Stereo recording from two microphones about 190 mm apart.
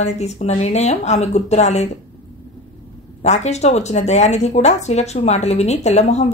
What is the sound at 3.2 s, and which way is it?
Speech, 35° left (ahead or behind).